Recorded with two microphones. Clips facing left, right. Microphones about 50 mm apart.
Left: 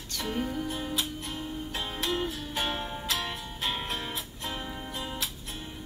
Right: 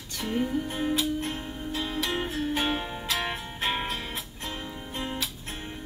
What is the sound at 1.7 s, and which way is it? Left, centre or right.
Music, left.